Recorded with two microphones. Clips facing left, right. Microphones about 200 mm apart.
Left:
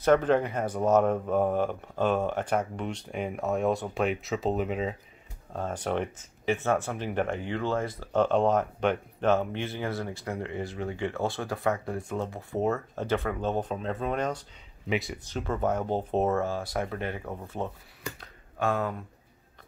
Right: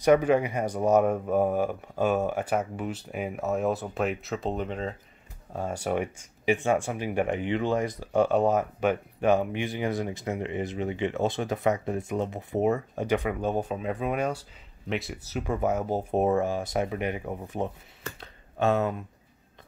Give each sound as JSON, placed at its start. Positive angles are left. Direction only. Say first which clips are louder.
{"t": 0.0, "sound": "speech", "louder": "right 2 dB", "side_deg": -10}
{"t": 5.5, "sound": "speech", "louder": "right 1 dB", "side_deg": -10}